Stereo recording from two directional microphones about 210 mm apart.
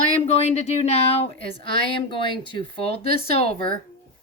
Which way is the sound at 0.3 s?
30° left (ahead or behind).